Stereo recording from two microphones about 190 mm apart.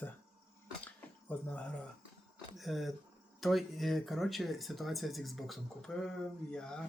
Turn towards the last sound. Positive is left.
turn(degrees=5)  # may be behind; listen again after turning